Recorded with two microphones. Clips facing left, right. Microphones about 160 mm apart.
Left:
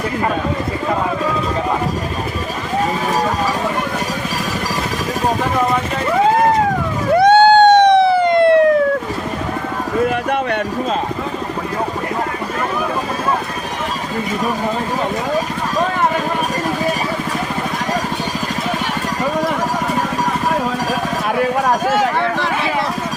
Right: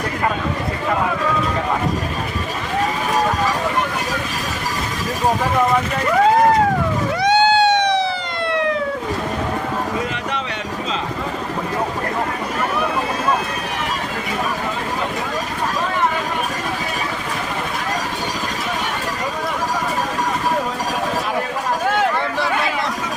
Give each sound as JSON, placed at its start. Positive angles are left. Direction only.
{"t": 7.2, "sound": "emergency vehicle", "side_deg": 55}